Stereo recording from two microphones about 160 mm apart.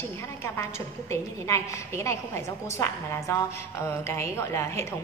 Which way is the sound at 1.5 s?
15° left (ahead or behind).